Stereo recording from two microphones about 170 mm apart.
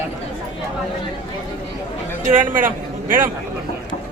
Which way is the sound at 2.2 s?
50° right (ahead or behind).